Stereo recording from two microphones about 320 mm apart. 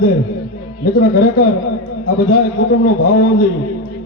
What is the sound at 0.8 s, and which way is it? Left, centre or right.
A man's voice, left.